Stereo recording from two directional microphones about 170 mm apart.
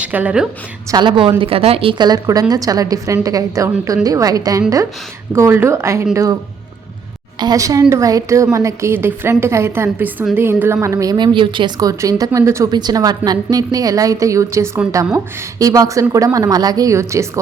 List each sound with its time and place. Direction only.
0.0 s a woman's voice: 10° right (ahead or behind)
0.9 s a woman's voice: 25° right (ahead or behind)